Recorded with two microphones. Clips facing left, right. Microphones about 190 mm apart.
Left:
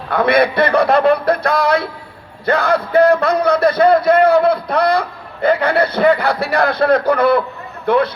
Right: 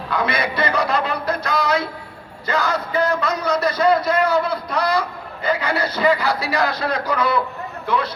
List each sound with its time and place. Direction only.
0.1 s a man's voice: 60° left (ahead or behind)